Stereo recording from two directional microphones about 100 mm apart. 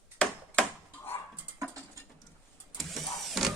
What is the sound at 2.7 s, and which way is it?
Vehicle, centre (ahead or behind).